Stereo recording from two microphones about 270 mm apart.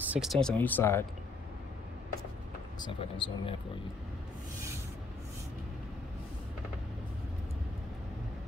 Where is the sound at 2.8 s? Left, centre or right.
Centre.